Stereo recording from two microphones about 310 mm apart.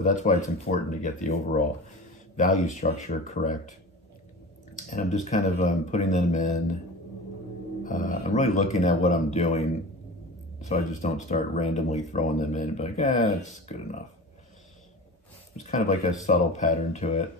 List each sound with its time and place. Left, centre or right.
0.0 s speech: left
2.3 s speech: left
4.8 s speech: left
7.8 s speech: left
10.7 s speech: left
15.6 s speech: left